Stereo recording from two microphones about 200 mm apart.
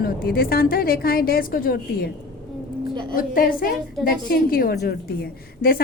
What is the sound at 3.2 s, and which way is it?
A woman's voice, 45° left (ahead or behind).